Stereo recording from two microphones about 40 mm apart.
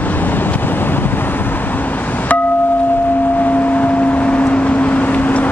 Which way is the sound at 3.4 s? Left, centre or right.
Left.